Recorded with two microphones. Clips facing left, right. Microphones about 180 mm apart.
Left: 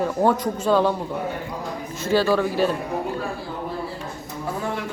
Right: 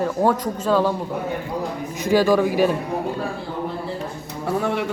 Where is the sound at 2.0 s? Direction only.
15° right (ahead or behind).